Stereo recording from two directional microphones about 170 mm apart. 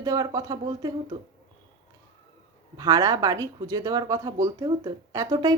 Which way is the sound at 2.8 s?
20° right (ahead or behind).